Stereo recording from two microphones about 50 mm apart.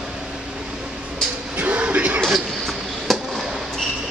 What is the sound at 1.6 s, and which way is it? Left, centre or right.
Music, right.